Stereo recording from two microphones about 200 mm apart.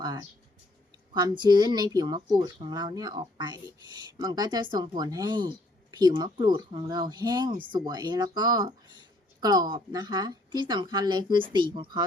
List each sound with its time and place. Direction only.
0.0 s speech: 20° right (ahead or behind)
1.5 s speech: 20° right (ahead or behind)